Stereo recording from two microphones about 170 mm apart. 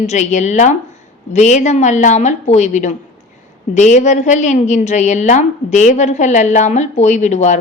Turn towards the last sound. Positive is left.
turn(degrees=45)  # may be behind; listen again after turning